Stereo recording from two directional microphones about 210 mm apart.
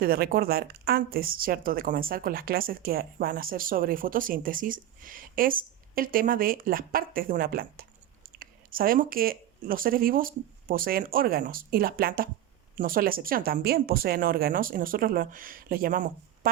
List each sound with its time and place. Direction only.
0.0 s speech: 45° right (ahead or behind)